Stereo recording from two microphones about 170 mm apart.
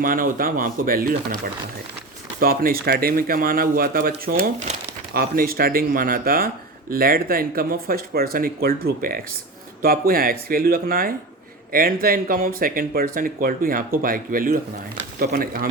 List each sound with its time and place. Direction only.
0.0 s speech: 55° right (ahead or behind)
2.4 s speech: 60° right (ahead or behind)